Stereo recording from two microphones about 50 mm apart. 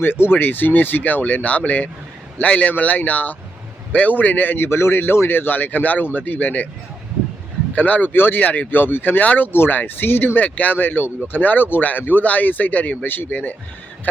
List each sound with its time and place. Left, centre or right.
0.0 s speech: left
7.8 s speech: left
10.4 s speech: left